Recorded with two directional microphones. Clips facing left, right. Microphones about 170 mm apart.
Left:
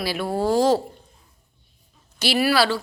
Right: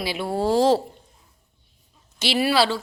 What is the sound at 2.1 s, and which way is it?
Speech, 25° right (ahead or behind).